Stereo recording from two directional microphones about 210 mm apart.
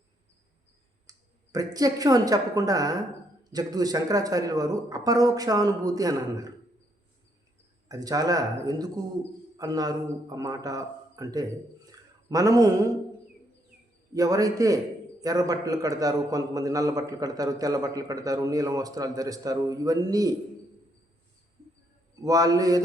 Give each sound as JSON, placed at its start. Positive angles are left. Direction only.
{"t": 1.1, "sound": "clicking", "side_deg": -15}
{"t": 1.5, "sound": "a man's voice", "side_deg": -15}
{"t": 7.9, "sound": "a man's voice", "side_deg": -15}
{"t": 11.9, "sound": "a sound", "side_deg": -15}
{"t": 14.1, "sound": "a man's voice", "side_deg": -15}
{"t": 22.2, "sound": "a man's voice", "side_deg": -15}